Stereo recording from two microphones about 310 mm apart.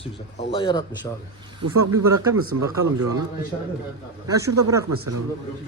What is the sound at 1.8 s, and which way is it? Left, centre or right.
Speech, right.